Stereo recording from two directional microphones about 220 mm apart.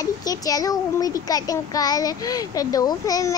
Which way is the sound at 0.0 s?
15° left (ahead or behind).